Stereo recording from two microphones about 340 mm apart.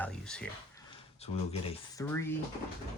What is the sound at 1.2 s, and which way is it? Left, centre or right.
Speech, centre.